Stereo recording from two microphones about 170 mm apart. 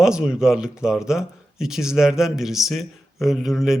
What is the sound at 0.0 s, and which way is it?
Speech, 5° right (ahead or behind).